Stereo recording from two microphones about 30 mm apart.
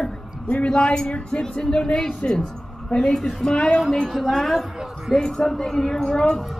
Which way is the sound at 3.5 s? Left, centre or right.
Left.